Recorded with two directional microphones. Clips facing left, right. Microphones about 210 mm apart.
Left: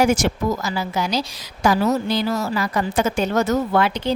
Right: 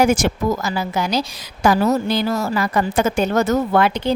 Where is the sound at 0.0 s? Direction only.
55° right (ahead or behind).